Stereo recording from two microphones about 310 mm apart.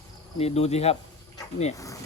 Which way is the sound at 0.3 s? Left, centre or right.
Centre.